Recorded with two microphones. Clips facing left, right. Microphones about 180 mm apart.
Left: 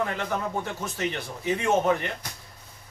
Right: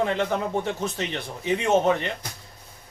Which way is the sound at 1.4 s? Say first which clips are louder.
Right 2 dB; 20° right (ahead or behind).